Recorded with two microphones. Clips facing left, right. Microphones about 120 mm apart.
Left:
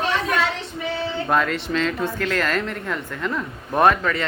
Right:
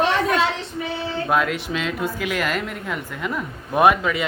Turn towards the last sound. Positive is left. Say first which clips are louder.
# right 1 dB
turn(degrees=-5)  # may be behind; listen again after turning